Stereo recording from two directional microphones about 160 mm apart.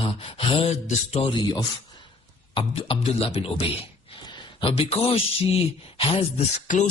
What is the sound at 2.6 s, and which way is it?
Speech, 35° left (ahead or behind).